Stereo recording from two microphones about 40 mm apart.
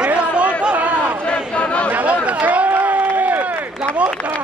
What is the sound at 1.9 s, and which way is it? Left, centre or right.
Run, right.